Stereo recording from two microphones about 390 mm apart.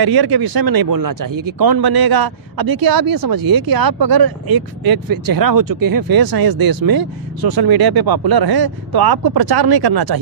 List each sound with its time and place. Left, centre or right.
0.0 s speech: right